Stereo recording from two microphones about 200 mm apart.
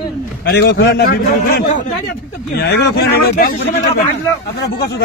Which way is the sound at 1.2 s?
45° left (ahead or behind).